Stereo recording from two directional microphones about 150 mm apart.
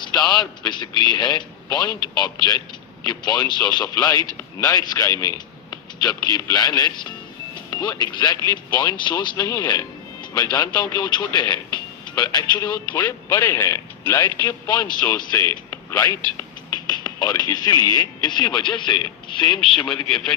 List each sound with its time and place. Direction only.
0.0 s speech: 30° left (ahead or behind)
20.1 s a man's voice: centre (ahead or behind)